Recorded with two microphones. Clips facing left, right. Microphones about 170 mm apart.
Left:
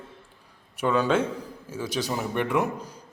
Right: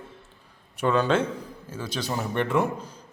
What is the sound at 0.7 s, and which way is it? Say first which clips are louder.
A man's voice: even; 10° left (ahead or behind).